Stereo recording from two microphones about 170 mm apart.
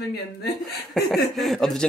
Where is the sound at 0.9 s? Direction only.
Centre (ahead or behind).